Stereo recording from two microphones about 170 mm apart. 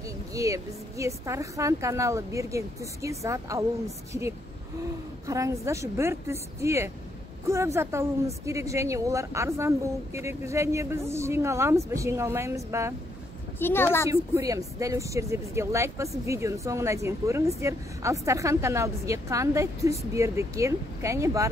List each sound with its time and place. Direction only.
0.3 s speech: 20° right (ahead or behind)
5.2 s speech: 20° right (ahead or behind)
13.6 s a woman's voice: 10° left (ahead or behind)
14.0 s speech: 20° right (ahead or behind)